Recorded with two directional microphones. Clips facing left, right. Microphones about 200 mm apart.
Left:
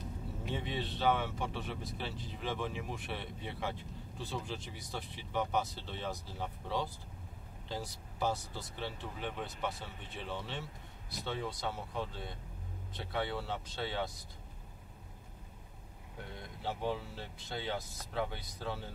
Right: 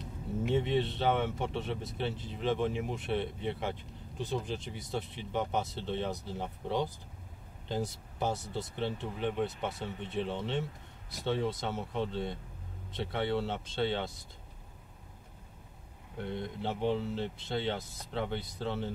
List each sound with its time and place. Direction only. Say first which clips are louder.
0.7 s speech: right 3 dB; 20° right (ahead or behind)
16.3 s speech: right 6 dB; 25° right (ahead or behind)